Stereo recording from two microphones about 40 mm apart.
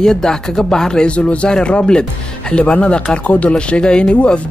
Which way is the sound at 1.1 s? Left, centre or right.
Left.